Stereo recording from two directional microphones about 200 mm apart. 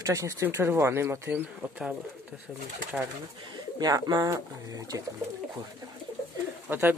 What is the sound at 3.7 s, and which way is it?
Speech, 20° right (ahead or behind).